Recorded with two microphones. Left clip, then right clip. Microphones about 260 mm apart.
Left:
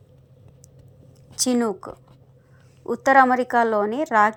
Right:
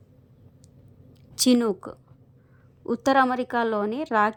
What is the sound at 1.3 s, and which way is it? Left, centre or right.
Speech, right.